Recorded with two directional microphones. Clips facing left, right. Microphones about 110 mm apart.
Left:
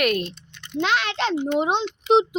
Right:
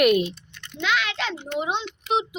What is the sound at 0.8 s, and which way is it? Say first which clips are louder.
Speech: left 3 dB; 35° left (ahead or behind).